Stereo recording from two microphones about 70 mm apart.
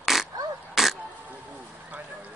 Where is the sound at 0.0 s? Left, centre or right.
Centre.